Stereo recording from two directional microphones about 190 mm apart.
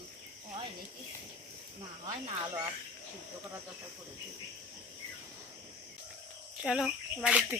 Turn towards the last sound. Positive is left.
turn(degrees=-5)  # may be behind; listen again after turning